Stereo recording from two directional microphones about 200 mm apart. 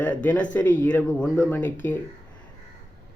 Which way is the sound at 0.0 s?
10° left (ahead or behind).